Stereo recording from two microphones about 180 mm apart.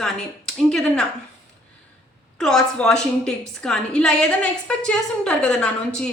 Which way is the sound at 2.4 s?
5° left (ahead or behind).